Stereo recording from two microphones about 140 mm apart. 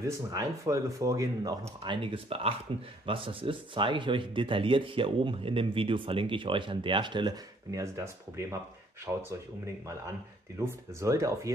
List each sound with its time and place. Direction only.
0.0 s speech: 25° right (ahead or behind)
2.0 s speech: 40° right (ahead or behind); by 9.2 s 15° right (ahead or behind)
10.6 s speech: 20° right (ahead or behind)